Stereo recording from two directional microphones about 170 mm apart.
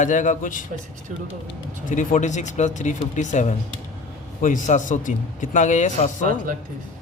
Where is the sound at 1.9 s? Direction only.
50° left (ahead or behind).